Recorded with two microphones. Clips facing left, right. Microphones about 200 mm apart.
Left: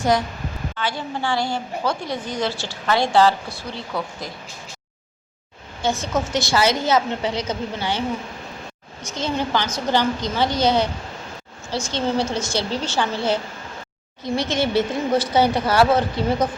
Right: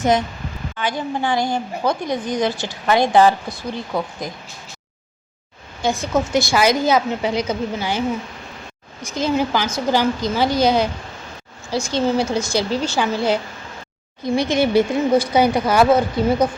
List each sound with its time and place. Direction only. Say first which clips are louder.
0.0 s a woman's voice: right 2 dB; 20° right (ahead or behind)
5.8 s a woman's voice: right 3 dB; 10° right (ahead or behind)
9.0 s a woman's voice: right 5 dB; 10° right (ahead or behind)